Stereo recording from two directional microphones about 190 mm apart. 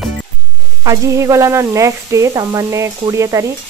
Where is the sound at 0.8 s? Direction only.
15° right (ahead or behind).